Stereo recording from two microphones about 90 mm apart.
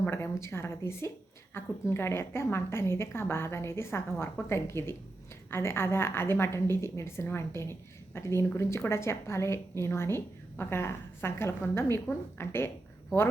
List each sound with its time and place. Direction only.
0.0 s a woman's voice: 30° left (ahead or behind)